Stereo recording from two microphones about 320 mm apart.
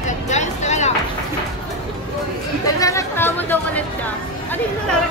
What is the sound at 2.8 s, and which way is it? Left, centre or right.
Chatter, centre.